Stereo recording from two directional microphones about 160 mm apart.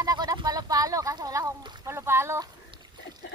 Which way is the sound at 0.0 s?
25° right (ahead or behind).